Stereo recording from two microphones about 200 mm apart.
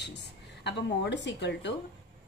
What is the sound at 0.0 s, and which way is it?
Speech, 60° left (ahead or behind).